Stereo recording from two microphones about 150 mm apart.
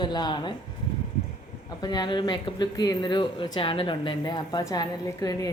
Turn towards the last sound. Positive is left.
turn(degrees=25)  # may be behind; listen again after turning